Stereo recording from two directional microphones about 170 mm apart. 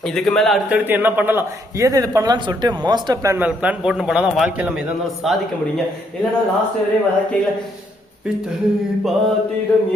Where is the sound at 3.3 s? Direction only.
10° right (ahead or behind).